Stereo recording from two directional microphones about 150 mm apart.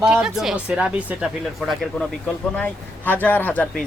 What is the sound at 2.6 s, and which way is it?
Speech, 10° left (ahead or behind).